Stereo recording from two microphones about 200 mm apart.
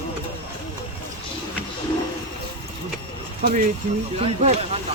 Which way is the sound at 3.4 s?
40° right (ahead or behind).